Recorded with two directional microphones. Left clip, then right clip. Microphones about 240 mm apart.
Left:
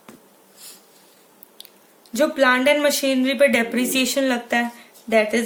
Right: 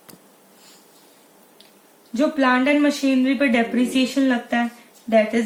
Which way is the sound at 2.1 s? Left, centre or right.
Left.